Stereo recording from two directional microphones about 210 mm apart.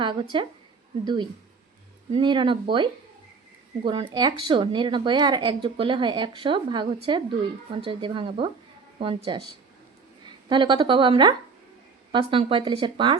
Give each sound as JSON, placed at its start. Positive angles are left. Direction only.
{"t": 0.0, "sound": "a woman's voice", "side_deg": -25}
{"t": 10.5, "sound": "a woman's voice", "side_deg": -20}